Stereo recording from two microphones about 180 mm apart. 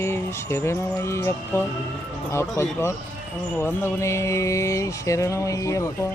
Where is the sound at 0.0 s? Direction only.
15° left (ahead or behind).